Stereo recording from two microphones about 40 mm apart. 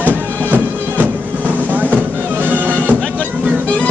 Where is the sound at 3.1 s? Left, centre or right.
Left.